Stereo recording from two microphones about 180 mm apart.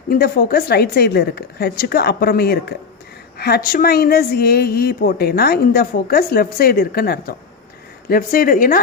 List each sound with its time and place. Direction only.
0.1 s a woman's voice: 55° left (ahead or behind)